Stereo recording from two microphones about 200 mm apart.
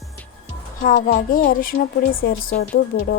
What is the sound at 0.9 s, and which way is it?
Speech, 40° left (ahead or behind).